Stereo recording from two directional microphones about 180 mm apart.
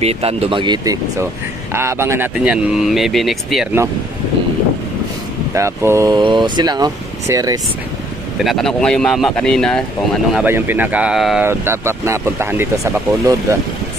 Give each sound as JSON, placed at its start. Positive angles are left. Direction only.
{"t": 0.0, "sound": "speech", "side_deg": -35}
{"t": 5.5, "sound": "speech", "side_deg": -15}
{"t": 8.5, "sound": "speech", "side_deg": 0}
{"t": 10.3, "sound": "speech", "side_deg": -10}
{"t": 11.4, "sound": "speech", "side_deg": -15}